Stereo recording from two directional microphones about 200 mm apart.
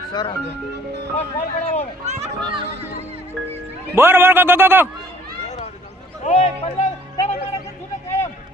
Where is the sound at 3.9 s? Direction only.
10° right (ahead or behind).